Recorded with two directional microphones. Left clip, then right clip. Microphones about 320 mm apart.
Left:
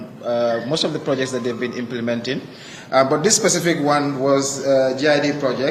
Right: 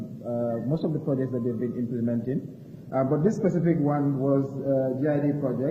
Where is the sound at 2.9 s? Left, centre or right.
Centre.